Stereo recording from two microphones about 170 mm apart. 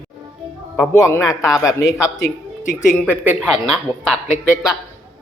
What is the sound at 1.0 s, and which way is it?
A man's voice, 20° left (ahead or behind).